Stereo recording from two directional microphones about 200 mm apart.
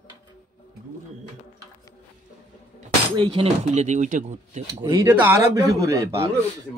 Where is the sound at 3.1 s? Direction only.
30° right (ahead or behind).